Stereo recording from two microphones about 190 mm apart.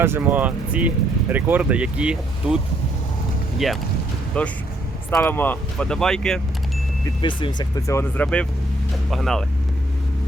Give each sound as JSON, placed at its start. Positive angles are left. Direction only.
{"t": 0.0, "sound": "speech", "side_deg": -10}
{"t": 3.6, "sound": "speech", "side_deg": 0}
{"t": 7.0, "sound": "speech", "side_deg": 25}